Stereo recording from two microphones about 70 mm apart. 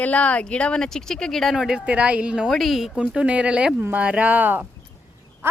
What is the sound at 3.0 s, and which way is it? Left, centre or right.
Speech, centre.